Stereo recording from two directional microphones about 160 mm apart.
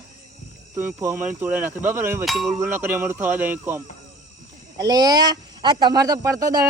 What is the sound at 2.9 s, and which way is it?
Speech, 15° right (ahead or behind).